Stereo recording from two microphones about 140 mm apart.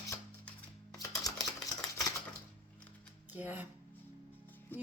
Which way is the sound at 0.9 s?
25° left (ahead or behind).